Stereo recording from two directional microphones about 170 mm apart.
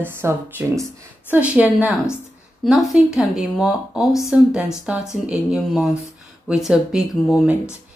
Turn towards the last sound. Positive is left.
turn(degrees=0)  # may be behind; listen again after turning